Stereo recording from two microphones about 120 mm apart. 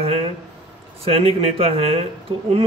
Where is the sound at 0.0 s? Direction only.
55° right (ahead or behind).